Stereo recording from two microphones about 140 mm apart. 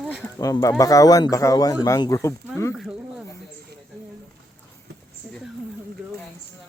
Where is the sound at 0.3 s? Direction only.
25° left (ahead or behind).